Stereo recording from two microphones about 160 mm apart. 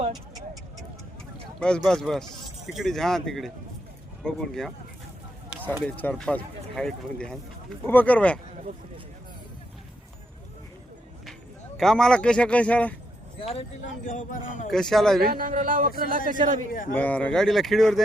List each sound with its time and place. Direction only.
1.5 s speech: 5° left (ahead or behind)
5.8 s speech: 10° left (ahead or behind)
11.8 s speech: 5° left (ahead or behind)
13.4 s speech: 35° left (ahead or behind)
14.0 s speech: 55° left (ahead or behind)
14.7 s speech: centre (ahead or behind)
15.2 s speech: 65° right (ahead or behind)
16.9 s speech: 10° left (ahead or behind)